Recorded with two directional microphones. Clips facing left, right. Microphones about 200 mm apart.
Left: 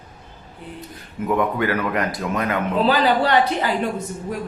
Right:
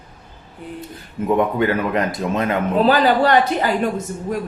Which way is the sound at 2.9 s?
45° right (ahead or behind).